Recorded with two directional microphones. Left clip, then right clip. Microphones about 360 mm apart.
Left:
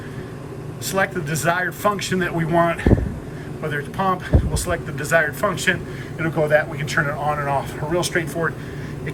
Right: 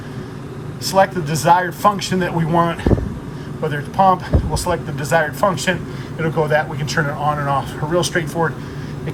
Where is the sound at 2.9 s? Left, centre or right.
Centre.